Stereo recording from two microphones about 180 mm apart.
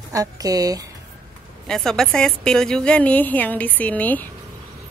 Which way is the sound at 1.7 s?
5° left (ahead or behind).